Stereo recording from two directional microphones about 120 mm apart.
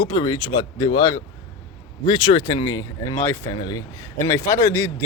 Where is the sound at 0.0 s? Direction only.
40° left (ahead or behind).